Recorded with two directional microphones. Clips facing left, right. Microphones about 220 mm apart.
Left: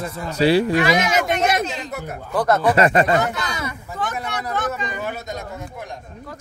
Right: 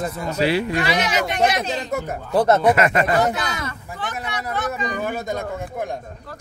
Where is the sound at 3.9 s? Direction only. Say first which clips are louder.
Left 3 dB; 50° left (ahead or behind).